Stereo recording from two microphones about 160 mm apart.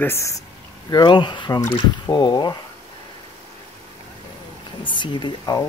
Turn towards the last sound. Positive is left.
turn(degrees=25)  # may be behind; listen again after turning